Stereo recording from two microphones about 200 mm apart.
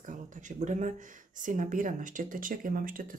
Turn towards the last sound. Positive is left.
turn(degrees=-45)  # may be behind; listen again after turning